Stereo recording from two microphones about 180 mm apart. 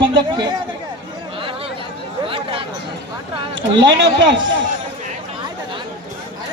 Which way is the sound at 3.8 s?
85° right.